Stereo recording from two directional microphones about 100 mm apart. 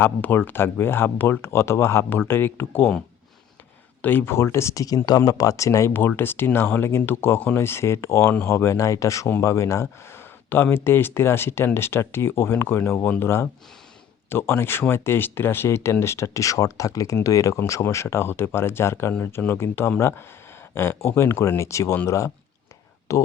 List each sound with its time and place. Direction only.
0.0 s speech: 20° left (ahead or behind)
4.0 s speech: 20° left (ahead or behind)